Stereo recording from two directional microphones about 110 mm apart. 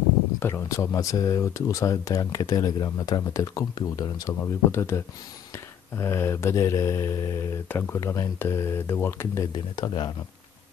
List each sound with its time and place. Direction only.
0.4 s speech: 25° left (ahead or behind)
4.4 s speech: 20° left (ahead or behind)
7.6 s speech: 15° left (ahead or behind)
8.0 s speech: 30° left (ahead or behind)
9.8 s speech: 40° left (ahead or behind)